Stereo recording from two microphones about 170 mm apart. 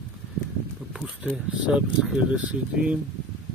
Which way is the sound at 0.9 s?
5° right (ahead or behind).